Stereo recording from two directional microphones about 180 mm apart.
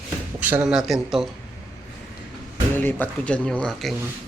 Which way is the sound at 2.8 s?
10° left (ahead or behind).